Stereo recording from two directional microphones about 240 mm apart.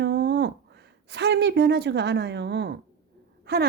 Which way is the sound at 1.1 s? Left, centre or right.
Right.